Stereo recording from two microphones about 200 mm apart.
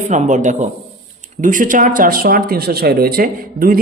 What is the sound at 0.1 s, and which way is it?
A man's voice, 40° right (ahead or behind).